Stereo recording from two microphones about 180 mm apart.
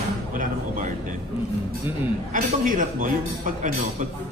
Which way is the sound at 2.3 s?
45° right (ahead or behind).